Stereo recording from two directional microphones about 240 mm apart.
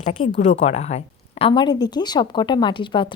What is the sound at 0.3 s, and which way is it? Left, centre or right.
Speech, left.